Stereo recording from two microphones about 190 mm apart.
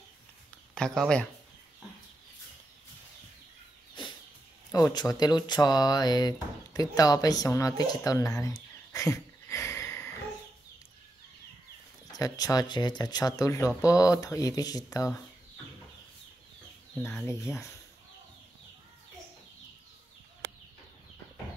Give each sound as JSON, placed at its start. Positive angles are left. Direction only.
{"t": 0.7, "sound": "speech", "side_deg": 5}
{"t": 4.7, "sound": "speech", "side_deg": 20}
{"t": 12.1, "sound": "speech", "side_deg": 20}
{"t": 17.5, "sound": "speech", "side_deg": 15}